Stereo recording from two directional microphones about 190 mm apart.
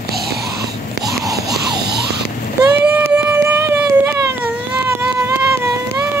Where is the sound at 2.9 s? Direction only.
10° right (ahead or behind).